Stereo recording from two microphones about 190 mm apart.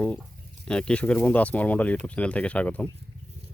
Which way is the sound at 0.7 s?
5° left (ahead or behind).